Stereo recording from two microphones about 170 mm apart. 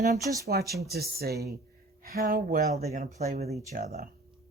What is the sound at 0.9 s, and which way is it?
Speech, 65° right (ahead or behind).